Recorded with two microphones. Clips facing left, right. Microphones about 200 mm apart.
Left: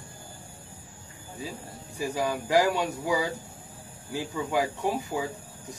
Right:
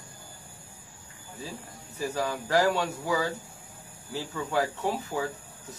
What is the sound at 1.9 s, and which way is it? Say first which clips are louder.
Speech: left 2 dB; 15° left (ahead or behind).